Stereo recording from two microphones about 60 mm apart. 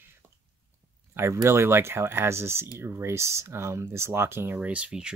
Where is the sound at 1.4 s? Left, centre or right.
Right.